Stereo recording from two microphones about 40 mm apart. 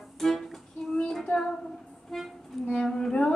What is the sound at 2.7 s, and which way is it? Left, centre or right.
Child singing, centre.